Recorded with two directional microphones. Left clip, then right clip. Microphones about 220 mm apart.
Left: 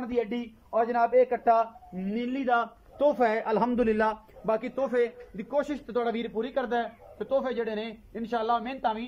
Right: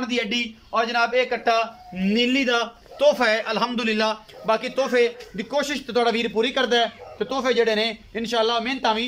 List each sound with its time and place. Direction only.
0.1 s a man's voice: 20° left (ahead or behind)
2.1 s a man's voice: 10° left (ahead or behind)
3.3 s a man's voice: 30° left (ahead or behind)
4.5 s a man's voice: 20° left (ahead or behind)